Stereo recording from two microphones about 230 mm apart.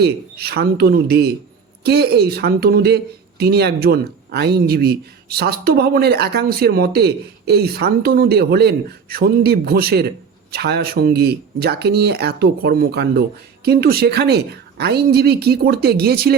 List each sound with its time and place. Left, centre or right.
0.0 s speech: right